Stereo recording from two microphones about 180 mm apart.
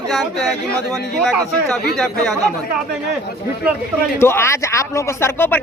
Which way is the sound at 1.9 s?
Centre (ahead or behind).